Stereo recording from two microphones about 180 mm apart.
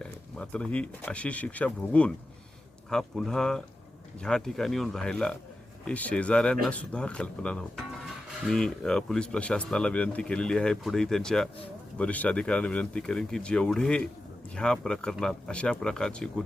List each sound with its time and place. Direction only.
0.0 s speech: 5° left (ahead or behind)